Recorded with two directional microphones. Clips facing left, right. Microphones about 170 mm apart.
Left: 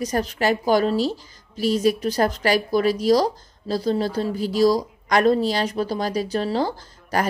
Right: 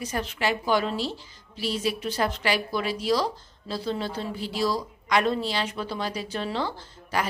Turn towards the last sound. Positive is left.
turn(degrees=40)  # may be behind; listen again after turning